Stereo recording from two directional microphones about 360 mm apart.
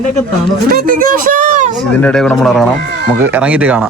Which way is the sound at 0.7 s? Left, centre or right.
Right.